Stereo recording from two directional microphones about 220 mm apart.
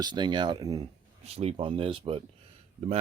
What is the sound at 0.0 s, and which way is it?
Speech, 20° right (ahead or behind).